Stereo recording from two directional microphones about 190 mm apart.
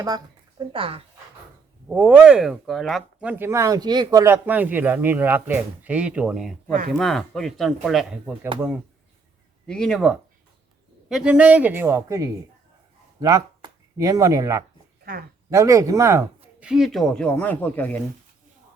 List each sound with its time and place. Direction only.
0.7 s speech: 30° right (ahead or behind)
1.9 s speech: 5° right (ahead or behind)
9.6 s speech: 5° left (ahead or behind)